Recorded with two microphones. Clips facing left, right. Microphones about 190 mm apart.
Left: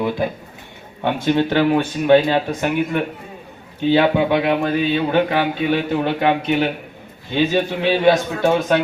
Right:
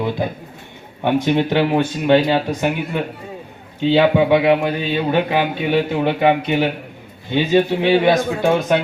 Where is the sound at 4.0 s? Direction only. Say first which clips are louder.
Right 4 dB; 15° right (ahead or behind).